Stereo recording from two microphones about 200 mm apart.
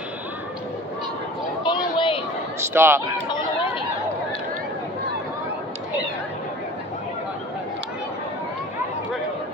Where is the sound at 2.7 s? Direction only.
10° right (ahead or behind).